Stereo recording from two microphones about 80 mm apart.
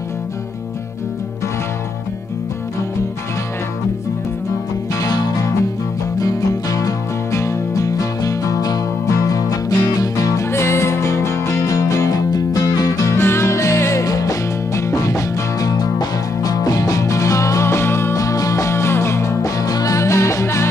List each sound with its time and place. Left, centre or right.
5.0 s music: left
13.2 s music: left